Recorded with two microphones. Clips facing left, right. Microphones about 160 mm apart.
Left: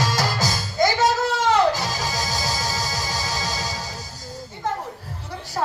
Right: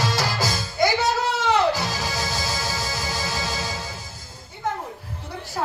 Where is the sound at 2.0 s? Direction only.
45° left (ahead or behind).